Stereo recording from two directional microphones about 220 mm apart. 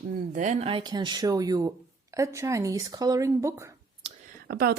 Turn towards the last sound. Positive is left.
turn(degrees=-45)  # may be behind; listen again after turning